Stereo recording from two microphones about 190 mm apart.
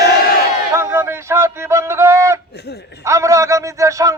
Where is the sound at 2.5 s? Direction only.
60° left (ahead or behind).